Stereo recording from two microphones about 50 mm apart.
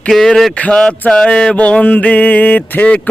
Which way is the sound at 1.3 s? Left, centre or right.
Left.